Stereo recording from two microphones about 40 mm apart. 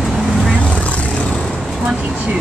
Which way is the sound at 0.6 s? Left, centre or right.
Left.